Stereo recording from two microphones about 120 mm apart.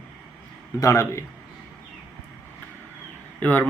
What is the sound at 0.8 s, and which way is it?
Speech, 25° left (ahead or behind).